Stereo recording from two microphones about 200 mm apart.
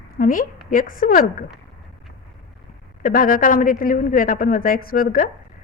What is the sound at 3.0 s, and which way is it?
A woman's voice, 45° left (ahead or behind).